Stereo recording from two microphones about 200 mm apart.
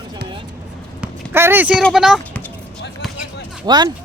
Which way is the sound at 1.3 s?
10° right (ahead or behind).